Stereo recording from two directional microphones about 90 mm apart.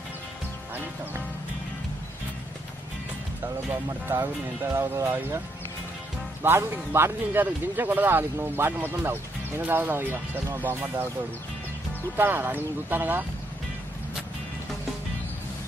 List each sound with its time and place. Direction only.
4.7 s speech: 35° right (ahead or behind)
6.4 s speech: 25° right (ahead or behind)
12.2 s speech: 20° right (ahead or behind)